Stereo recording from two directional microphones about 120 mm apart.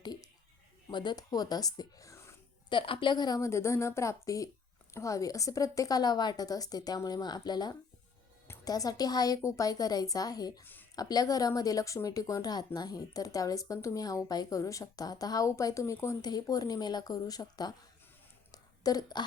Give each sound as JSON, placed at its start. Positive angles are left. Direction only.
{"t": 0.0, "sound": "a sound", "side_deg": 35}
{"t": 0.9, "sound": "speech", "side_deg": 40}
{"t": 2.6, "sound": "a woman's voice", "side_deg": 45}
{"t": 10.6, "sound": "a woman's voice", "side_deg": 15}
{"t": 10.9, "sound": "speech", "side_deg": 30}
{"t": 18.5, "sound": "a sound", "side_deg": 30}